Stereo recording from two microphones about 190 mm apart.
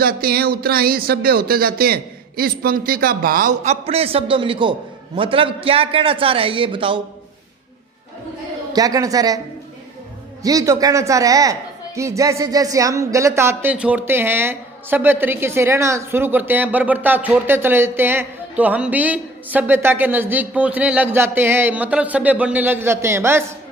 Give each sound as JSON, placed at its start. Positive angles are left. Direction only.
{"t": 0.0, "sound": "a man's voice", "side_deg": -50}
{"t": 8.7, "sound": "a man's voice", "side_deg": -20}
{"t": 10.4, "sound": "speech", "side_deg": -20}